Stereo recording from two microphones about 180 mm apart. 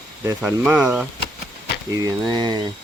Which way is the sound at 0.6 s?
5° right (ahead or behind).